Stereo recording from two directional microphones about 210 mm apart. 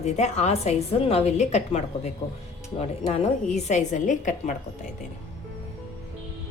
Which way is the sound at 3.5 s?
35° left (ahead or behind).